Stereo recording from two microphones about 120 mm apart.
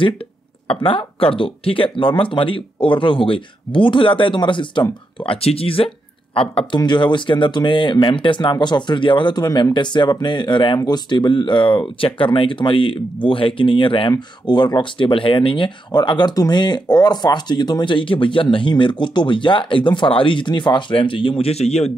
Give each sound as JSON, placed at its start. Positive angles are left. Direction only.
{"t": 0.8, "sound": "speech", "side_deg": 50}